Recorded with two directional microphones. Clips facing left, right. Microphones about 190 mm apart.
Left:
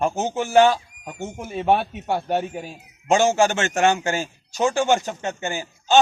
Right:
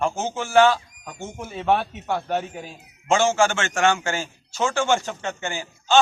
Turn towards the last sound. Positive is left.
turn(degrees=15)  # may be behind; listen again after turning